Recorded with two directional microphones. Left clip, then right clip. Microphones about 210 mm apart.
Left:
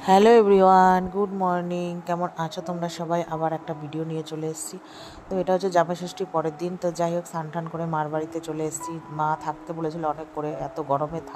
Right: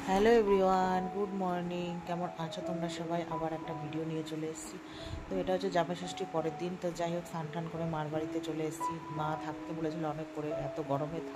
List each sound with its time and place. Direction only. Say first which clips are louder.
0.0 s speech: left 11 dB; 40° left (ahead or behind)
9.8 s speech: left 10 dB; 25° left (ahead or behind)